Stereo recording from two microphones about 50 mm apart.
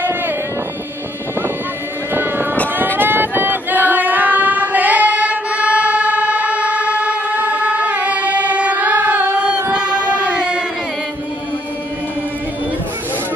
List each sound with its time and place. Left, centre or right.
3.0 s child singing: right
9.5 s music: right
9.9 s child singing: left
10.2 s a sound: centre